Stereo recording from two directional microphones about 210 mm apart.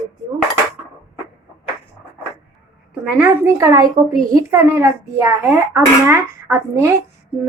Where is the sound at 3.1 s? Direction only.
10° right (ahead or behind).